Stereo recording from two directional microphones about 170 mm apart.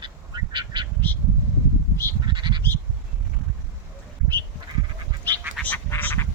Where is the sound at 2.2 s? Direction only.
25° right (ahead or behind).